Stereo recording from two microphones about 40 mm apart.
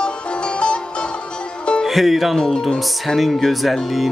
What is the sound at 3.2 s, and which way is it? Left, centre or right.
Speech, centre.